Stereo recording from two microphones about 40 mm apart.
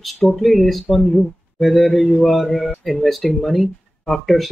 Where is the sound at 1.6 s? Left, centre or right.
Centre.